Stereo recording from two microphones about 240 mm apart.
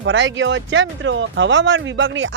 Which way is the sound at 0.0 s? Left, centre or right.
Right.